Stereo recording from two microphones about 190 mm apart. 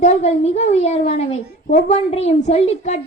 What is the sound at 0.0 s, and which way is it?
A woman's voice, 35° left (ahead or behind).